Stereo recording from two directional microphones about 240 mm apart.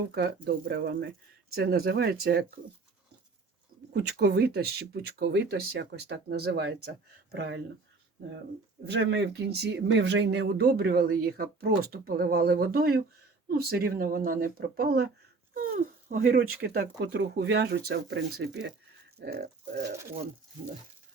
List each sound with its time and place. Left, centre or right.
0.1 s speech: right
3.9 s speech: right
8.9 s speech: right